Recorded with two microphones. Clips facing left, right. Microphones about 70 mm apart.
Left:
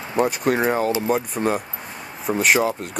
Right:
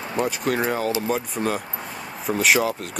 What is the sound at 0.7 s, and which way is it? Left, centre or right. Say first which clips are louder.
Speech: left 3 dB; left.